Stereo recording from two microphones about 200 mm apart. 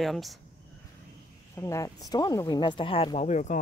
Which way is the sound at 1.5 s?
15° left (ahead or behind).